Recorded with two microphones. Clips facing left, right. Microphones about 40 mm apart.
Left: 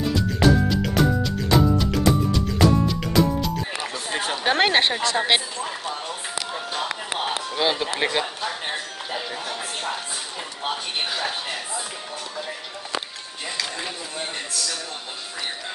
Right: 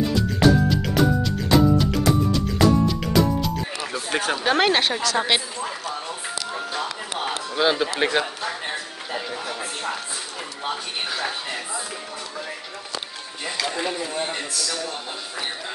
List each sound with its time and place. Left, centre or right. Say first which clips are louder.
0.0 s music: right 1 dB; centre
4.4 s speech: left 1 dB; left
5.1 s speech: even; centre
7.6 s speech: right 3 dB; centre
13.6 s music: right 5 dB; centre
13.9 s a man's voice: right 4 dB; centre